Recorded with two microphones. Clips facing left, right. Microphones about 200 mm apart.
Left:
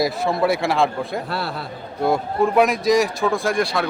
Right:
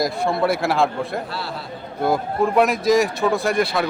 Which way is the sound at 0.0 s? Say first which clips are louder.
Left 1 dB; centre (ahead or behind).